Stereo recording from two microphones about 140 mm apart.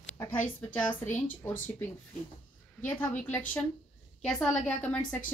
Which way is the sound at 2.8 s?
10° left (ahead or behind).